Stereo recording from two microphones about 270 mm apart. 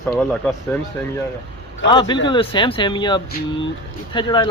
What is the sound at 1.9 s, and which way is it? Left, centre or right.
Speech, centre.